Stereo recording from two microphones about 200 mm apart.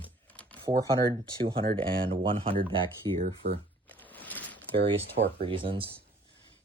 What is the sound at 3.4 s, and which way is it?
Speech, 60° right (ahead or behind).